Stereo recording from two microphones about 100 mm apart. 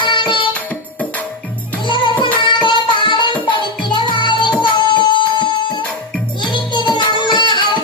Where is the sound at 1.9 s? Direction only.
55° left (ahead or behind).